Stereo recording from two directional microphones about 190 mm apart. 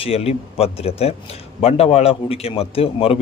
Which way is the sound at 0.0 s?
30° left (ahead or behind).